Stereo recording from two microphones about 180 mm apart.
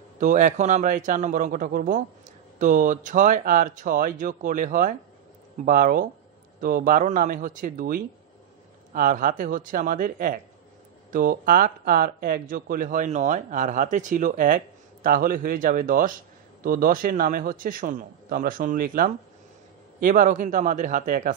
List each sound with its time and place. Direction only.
0.2 s speech: 45° right (ahead or behind)